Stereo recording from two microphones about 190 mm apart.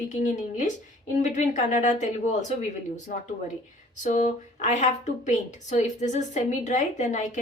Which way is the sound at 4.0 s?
40° left (ahead or behind).